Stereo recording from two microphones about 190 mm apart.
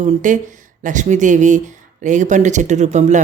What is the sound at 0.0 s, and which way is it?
Speech, 40° right (ahead or behind).